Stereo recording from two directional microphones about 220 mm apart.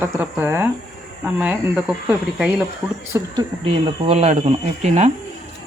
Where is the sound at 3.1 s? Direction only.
20° right (ahead or behind).